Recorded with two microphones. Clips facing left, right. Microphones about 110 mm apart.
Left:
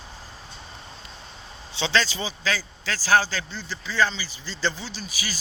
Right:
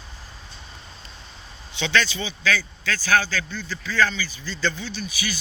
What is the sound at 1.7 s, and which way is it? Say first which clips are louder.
A man's voice: right 1 dB; 30° left (ahead or behind).